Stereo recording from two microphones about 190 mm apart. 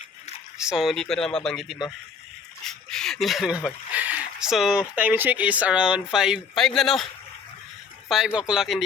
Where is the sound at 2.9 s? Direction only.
5° left (ahead or behind).